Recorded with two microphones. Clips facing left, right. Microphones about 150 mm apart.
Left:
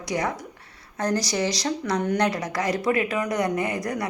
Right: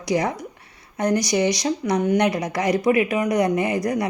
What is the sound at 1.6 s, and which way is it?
Speech, 15° right (ahead or behind).